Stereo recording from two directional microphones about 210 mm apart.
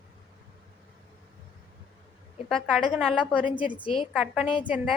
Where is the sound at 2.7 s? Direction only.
Centre (ahead or behind).